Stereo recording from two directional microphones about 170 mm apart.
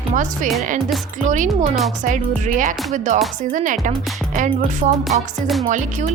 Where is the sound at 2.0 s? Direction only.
50° right (ahead or behind).